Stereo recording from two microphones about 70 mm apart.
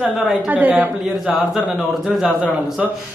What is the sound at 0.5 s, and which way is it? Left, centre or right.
Speech, right.